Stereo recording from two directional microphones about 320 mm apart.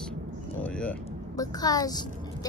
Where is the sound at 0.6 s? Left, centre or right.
Centre.